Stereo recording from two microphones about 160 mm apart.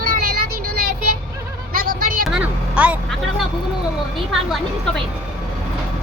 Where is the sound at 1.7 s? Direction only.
65° right (ahead or behind).